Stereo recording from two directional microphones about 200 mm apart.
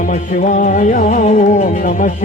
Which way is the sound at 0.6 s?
40° left (ahead or behind).